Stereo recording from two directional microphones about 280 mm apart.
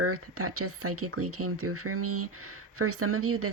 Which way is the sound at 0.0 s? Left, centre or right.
Right.